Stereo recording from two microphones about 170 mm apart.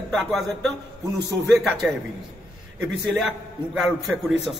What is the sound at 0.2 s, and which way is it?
A man's voice, centre (ahead or behind).